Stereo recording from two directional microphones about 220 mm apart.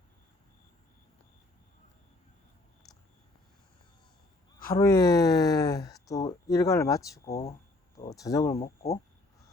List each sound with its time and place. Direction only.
4.7 s speech: 15° left (ahead or behind)
8.6 s speech: 30° left (ahead or behind)